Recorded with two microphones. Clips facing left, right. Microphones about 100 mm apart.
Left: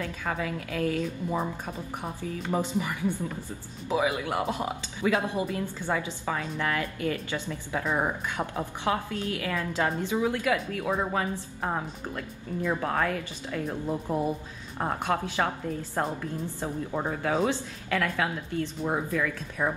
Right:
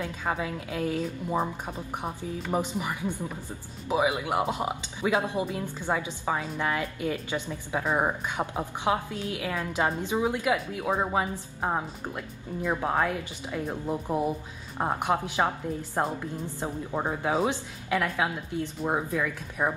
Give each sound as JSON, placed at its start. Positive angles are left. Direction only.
{"t": 0.0, "sound": "a woman's voice", "side_deg": -20}